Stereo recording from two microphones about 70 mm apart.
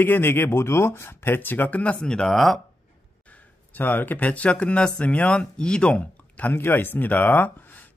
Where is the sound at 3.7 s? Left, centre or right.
Left.